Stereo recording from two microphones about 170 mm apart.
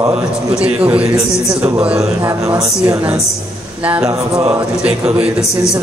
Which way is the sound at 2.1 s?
20° right (ahead or behind).